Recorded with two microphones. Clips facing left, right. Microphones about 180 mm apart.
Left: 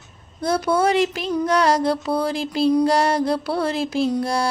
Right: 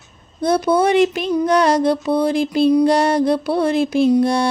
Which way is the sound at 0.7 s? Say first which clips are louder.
Right 3 dB; 20° right (ahead or behind).